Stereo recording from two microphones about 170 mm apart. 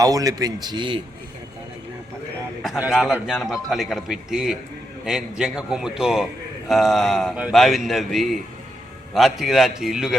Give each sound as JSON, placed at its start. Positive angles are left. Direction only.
{"t": 0.0, "sound": "a man's voice", "side_deg": -20}
{"t": 2.6, "sound": "a man's voice", "side_deg": 0}